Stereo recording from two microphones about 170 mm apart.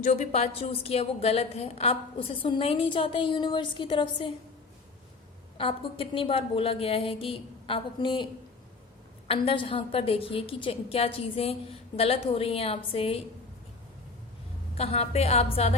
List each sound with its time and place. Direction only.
0.0 s a woman's voice: 45° left (ahead or behind)
5.5 s a woman's voice: 30° left (ahead or behind)
14.8 s a woman's voice: 35° left (ahead or behind)